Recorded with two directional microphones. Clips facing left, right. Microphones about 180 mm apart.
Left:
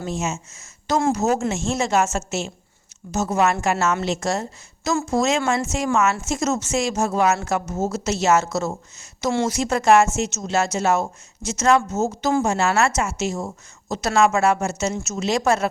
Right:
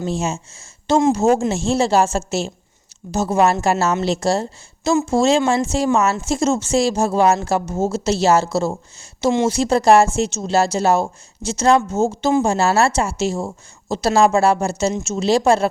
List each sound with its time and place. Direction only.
0.0 s speech: 30° right (ahead or behind)